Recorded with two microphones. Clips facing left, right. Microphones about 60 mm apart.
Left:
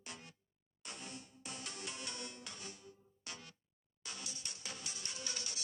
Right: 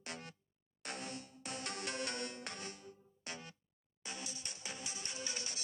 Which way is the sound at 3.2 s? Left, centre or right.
Right.